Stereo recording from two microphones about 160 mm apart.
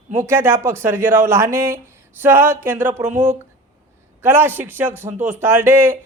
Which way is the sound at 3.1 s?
50° right (ahead or behind).